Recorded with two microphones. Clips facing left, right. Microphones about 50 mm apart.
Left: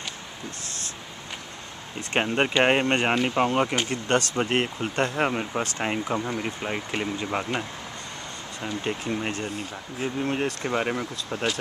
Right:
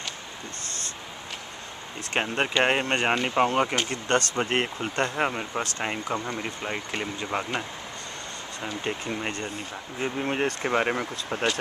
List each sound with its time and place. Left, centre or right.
2.1 s speech: centre
9.9 s speech: centre
11.0 s speech: right